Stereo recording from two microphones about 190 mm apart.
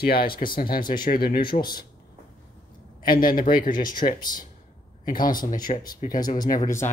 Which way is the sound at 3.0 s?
50° left (ahead or behind).